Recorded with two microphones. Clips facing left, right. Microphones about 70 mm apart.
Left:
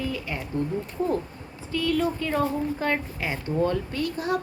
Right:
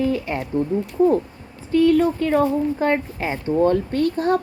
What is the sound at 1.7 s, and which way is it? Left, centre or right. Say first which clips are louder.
Speech: right 9 dB; right.